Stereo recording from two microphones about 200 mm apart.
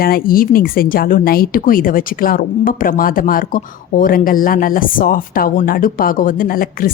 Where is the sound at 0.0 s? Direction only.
45° left (ahead or behind).